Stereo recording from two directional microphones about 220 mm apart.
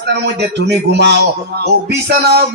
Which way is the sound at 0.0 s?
50° right (ahead or behind).